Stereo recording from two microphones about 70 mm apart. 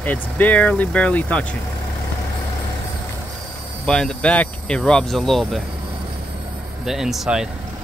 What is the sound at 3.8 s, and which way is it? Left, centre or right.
Speech, centre.